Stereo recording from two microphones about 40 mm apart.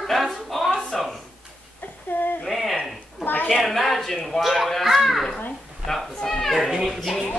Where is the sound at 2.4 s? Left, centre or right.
Centre.